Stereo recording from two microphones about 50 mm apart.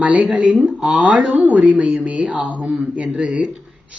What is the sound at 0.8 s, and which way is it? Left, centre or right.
Speech, centre.